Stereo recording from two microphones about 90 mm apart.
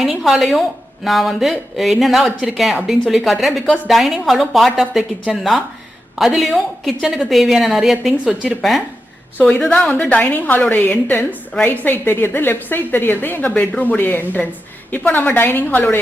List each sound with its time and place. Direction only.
0.0 s a woman's voice: centre (ahead or behind)
9.4 s a woman's voice: 10° left (ahead or behind)